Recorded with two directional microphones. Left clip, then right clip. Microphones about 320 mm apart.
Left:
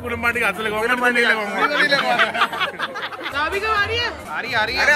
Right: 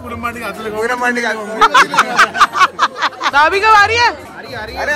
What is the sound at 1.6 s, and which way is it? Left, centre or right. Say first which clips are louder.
Speech: right 9 dB; centre.